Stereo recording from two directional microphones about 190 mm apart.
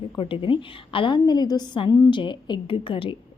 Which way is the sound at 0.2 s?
25° left (ahead or behind).